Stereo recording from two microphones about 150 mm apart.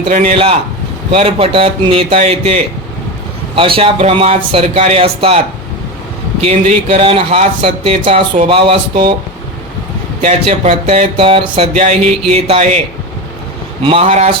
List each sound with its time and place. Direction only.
0.1 s speech: 65° right (ahead or behind)
0.3 s a man's voice: 35° right (ahead or behind)
6.4 s a man's voice: 40° right (ahead or behind)
10.2 s speech: 50° right (ahead or behind)
13.8 s a man's voice: 40° right (ahead or behind)